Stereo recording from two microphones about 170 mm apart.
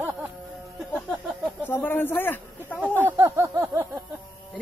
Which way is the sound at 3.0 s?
10° right (ahead or behind).